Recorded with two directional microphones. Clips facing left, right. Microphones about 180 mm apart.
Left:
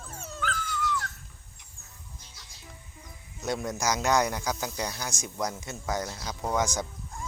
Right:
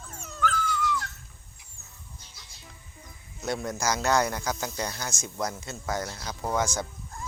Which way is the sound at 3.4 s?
15° left (ahead or behind).